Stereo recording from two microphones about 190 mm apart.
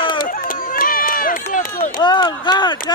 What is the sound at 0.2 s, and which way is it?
Run, 50° left (ahead or behind).